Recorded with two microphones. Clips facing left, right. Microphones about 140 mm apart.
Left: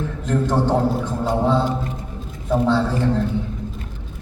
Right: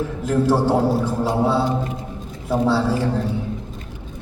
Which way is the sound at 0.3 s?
5° right (ahead or behind).